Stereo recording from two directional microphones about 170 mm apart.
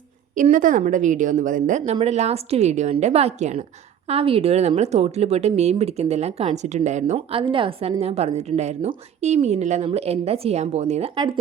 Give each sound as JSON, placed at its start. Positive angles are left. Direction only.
{"t": 0.3, "sound": "a woman's voice", "side_deg": -50}
{"t": 1.8, "sound": "a woman's voice", "side_deg": -35}
{"t": 7.4, "sound": "a woman's voice", "side_deg": -30}